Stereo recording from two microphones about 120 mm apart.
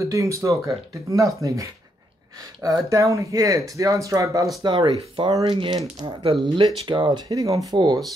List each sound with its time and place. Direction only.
0.0 s speech: 25° right (ahead or behind)
4.6 s speech: 40° right (ahead or behind)